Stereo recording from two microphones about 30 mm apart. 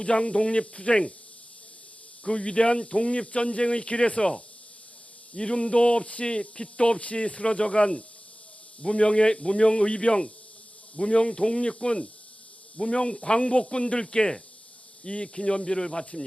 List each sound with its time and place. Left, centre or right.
0.0 s speech: left
2.2 s speech: left
5.3 s speech: left
7.0 s speech: left